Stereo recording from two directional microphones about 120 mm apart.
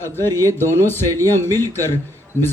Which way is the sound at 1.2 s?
20° left (ahead or behind).